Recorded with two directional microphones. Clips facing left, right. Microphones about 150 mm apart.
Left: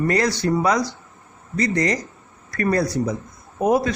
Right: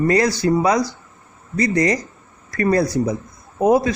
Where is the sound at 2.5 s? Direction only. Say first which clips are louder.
Right 3 dB; 20° right (ahead or behind).